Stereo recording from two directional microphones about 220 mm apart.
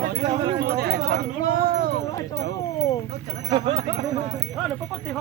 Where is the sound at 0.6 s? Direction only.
45° right (ahead or behind).